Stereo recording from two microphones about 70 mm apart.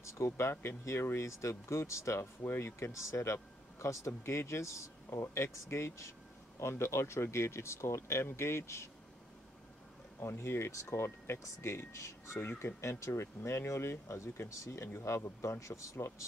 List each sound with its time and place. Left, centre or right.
0.0 s speech: left
10.2 s speech: left